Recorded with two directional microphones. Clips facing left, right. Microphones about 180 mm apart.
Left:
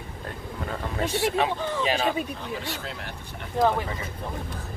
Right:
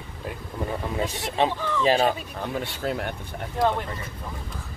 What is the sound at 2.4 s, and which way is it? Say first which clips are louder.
Speech: right 4 dB; 55° right (ahead or behind).